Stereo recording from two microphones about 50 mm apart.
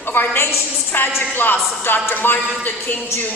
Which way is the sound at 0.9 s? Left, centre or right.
Left.